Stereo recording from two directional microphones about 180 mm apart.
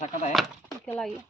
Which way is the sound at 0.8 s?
10° left (ahead or behind).